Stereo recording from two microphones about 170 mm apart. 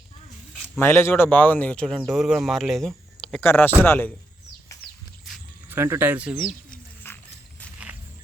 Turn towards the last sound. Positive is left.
turn(degrees=10)  # may be behind; listen again after turning